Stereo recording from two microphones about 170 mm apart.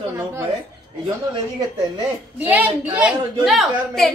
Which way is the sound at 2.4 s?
10° right (ahead or behind).